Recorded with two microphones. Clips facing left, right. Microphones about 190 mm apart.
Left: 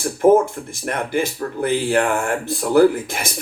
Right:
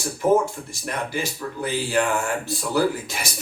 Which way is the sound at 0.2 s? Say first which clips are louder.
Left 6 dB; 50° left (ahead or behind).